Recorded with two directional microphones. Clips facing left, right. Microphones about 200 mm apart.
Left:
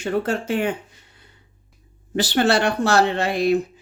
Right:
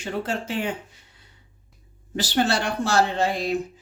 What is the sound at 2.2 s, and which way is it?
Speech, 65° left (ahead or behind).